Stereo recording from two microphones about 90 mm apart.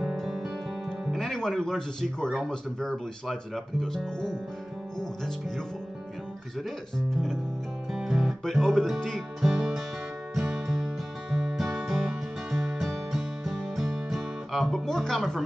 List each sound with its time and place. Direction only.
0.0 s music: 5° right (ahead or behind)
1.1 s speech: 5° left (ahead or behind)
7.9 s music: 5° right (ahead or behind)